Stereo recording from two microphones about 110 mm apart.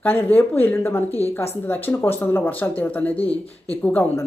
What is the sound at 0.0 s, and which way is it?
Speech, 15° left (ahead or behind).